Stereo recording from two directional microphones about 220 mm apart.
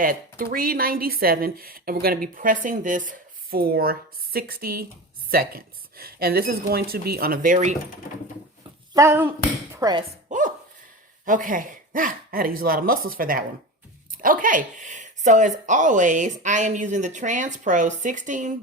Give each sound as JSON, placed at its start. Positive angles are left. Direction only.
{"t": 0.0, "sound": "a woman's voice", "side_deg": -40}
{"t": 8.9, "sound": "speech", "side_deg": -15}
{"t": 10.2, "sound": "dog", "side_deg": -35}
{"t": 11.3, "sound": "a woman's voice", "side_deg": -40}